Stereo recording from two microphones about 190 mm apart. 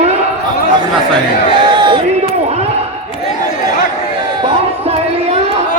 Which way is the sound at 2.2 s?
35° right (ahead or behind).